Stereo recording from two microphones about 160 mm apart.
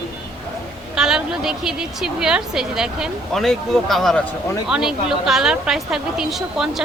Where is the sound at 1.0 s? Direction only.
5° right (ahead or behind).